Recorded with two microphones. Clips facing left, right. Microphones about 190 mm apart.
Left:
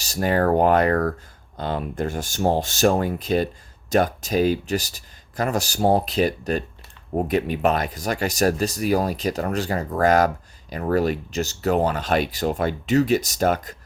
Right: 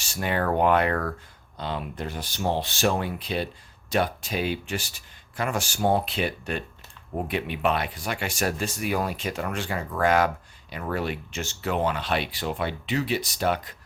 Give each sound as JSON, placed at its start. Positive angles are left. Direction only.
{"t": 0.0, "sound": "speech", "side_deg": 40}